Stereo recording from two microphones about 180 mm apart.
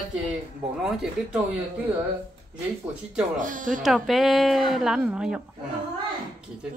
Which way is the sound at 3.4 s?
45° right (ahead or behind).